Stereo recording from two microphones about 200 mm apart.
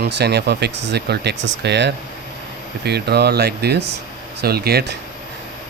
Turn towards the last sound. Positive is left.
turn(degrees=-50)  # may be behind; listen again after turning